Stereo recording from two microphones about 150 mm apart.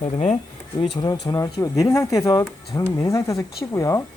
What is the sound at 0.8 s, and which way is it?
Speech, 25° left (ahead or behind).